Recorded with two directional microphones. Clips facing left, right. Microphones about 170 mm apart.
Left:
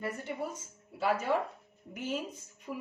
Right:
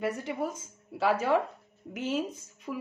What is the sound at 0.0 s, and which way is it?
A woman's voice, 90° right.